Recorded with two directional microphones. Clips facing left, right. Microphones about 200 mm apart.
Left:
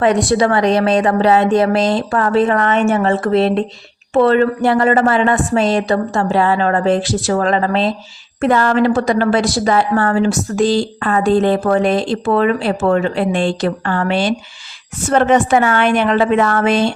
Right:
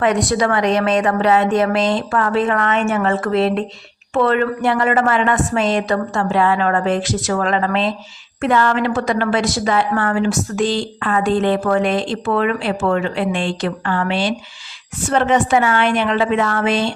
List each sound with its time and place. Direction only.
0.0 s a woman's voice: 30° left (ahead or behind); by 16.9 s 45° left (ahead or behind)